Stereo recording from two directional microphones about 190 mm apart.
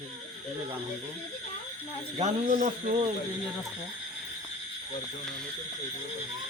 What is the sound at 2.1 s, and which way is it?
Speech, 40° right (ahead or behind).